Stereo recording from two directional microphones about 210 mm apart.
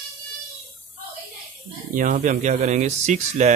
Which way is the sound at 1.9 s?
40° right (ahead or behind).